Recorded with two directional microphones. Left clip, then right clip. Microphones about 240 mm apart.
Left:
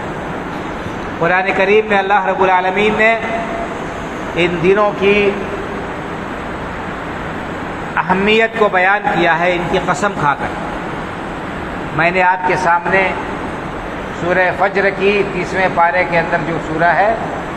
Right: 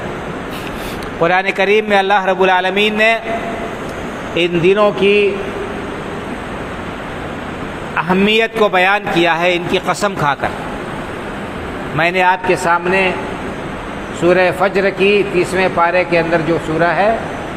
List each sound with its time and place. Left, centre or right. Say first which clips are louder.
1.2 s a man's voice: even; right
4.4 s a man's voice: right 1 dB; right
7.9 s a man's voice: left 1 dB; right
11.9 s a man's voice: even; right
14.3 s a man's voice: right 2 dB; right